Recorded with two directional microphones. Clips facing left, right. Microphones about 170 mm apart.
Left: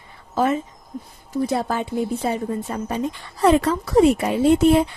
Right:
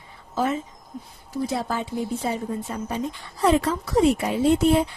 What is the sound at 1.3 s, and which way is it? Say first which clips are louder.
A woman's voice: left 4 dB; 55° left (ahead or behind).